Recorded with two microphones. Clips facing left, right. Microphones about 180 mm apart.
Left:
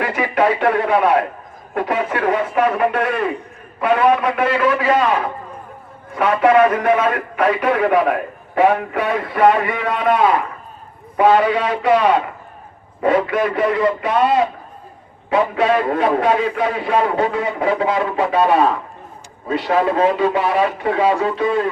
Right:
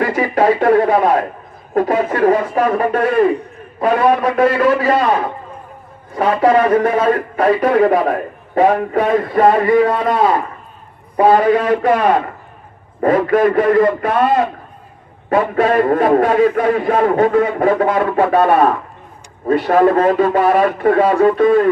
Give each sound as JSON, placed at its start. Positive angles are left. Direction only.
{"t": 0.0, "sound": "radio", "side_deg": -40}
{"t": 1.7, "sound": "speech", "side_deg": -40}
{"t": 6.1, "sound": "a man's voice", "side_deg": -35}